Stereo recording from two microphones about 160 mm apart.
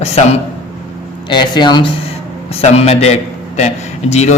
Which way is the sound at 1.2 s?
30° left (ahead or behind).